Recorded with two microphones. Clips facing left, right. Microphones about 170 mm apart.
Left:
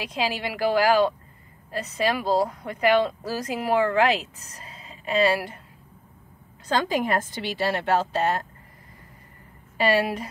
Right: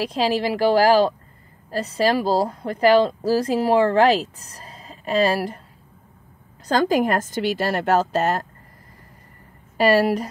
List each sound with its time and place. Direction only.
0.0 s speech: 35° right (ahead or behind)
6.7 s a woman's voice: 40° right (ahead or behind)
9.8 s speech: 40° right (ahead or behind)